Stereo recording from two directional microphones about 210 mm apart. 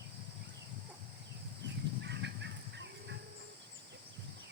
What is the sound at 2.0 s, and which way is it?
Fowl, 55° right (ahead or behind).